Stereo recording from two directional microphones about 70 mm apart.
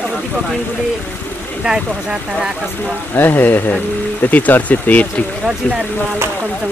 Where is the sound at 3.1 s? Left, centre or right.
Left.